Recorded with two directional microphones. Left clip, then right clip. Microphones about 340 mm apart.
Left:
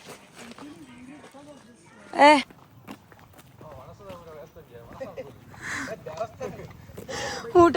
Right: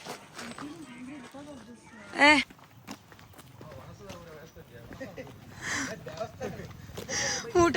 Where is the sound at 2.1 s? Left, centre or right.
Centre.